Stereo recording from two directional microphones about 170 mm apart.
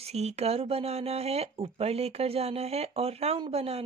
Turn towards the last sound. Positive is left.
turn(degrees=-35)  # may be behind; listen again after turning